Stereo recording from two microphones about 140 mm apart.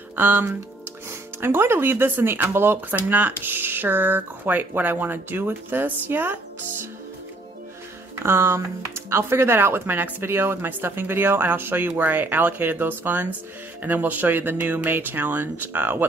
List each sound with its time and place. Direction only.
0.1 s speech: 15° right (ahead or behind)
8.2 s speech: 20° right (ahead or behind)